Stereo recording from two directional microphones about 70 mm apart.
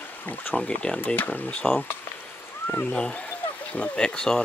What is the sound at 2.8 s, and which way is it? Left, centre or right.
Speech, centre.